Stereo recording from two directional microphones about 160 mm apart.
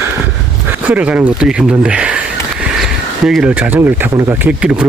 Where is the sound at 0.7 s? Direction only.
10° right (ahead or behind).